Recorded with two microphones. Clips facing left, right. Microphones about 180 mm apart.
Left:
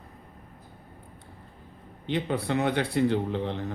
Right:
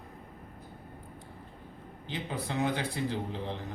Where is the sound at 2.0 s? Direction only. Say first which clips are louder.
Left 9 dB; 65° left (ahead or behind).